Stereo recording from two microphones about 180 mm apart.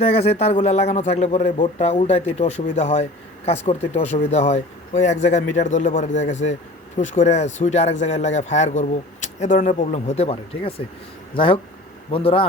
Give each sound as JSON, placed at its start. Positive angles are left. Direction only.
{"t": 0.0, "sound": "speech", "side_deg": 35}